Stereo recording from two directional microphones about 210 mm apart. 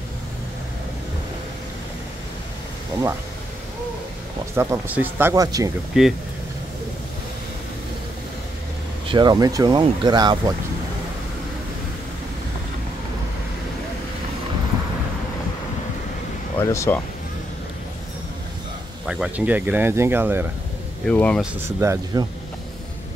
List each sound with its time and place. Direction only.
4.6 s speech: 10° right (ahead or behind)
5.9 s speech: 5° right (ahead or behind)
9.0 s speech: 20° right (ahead or behind)
16.5 s speech: 15° left (ahead or behind)
19.0 s speech: 5° right (ahead or behind)
21.1 s speech: 5° left (ahead or behind)
21.5 s speech: 15° right (ahead or behind)